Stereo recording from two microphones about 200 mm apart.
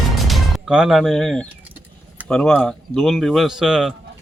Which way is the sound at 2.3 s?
Centre (ahead or behind).